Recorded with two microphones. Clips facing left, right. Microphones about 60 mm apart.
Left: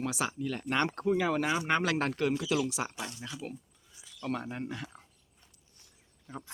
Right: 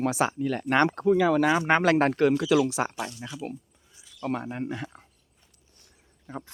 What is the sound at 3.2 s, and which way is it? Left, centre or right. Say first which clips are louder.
Speech: right 5 dB; right.